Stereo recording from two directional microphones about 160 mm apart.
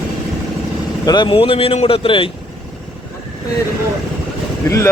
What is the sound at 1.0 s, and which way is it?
Speech, 25° left (ahead or behind).